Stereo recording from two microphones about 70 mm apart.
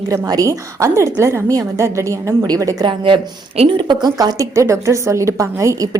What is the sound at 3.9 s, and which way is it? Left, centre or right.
Speech, right.